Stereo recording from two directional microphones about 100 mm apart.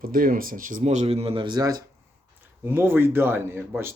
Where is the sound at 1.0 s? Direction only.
80° right; by 1.8 s 40° right (ahead or behind).